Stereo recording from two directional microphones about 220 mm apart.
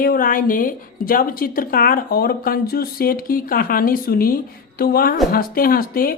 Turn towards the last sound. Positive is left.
turn(degrees=40)  # may be behind; listen again after turning